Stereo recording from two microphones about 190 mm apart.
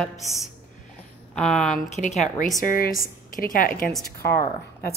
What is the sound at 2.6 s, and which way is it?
Speech, 50° left (ahead or behind).